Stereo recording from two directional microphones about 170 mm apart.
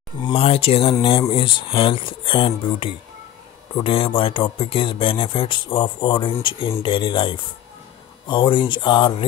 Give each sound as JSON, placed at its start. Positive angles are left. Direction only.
{"t": 0.2, "sound": "speech", "side_deg": 35}